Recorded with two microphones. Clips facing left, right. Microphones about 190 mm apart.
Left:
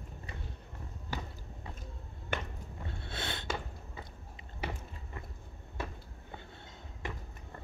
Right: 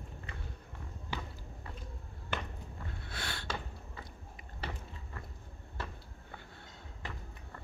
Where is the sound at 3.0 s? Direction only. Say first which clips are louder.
Left 4 dB; 25° left (ahead or behind).